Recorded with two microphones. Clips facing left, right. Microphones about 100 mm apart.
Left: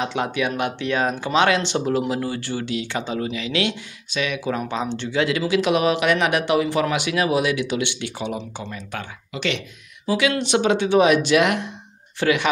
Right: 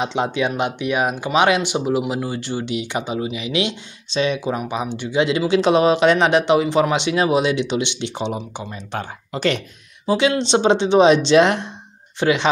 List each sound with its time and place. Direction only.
0.0 s speech: 20° right (ahead or behind)
4.6 s speech: 15° right (ahead or behind)
8.4 s speech: 15° right (ahead or behind)
8.7 s speech: 35° right (ahead or behind)
10.0 s speech: 25° right (ahead or behind)